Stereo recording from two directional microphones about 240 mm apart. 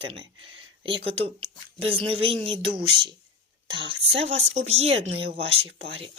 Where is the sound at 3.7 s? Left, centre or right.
Right.